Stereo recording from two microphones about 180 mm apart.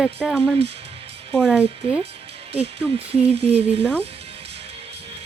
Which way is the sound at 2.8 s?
35° right (ahead or behind).